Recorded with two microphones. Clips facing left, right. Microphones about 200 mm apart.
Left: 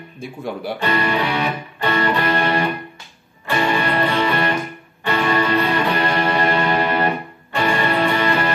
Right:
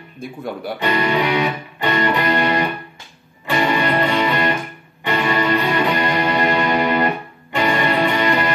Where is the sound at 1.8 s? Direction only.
15° right (ahead or behind).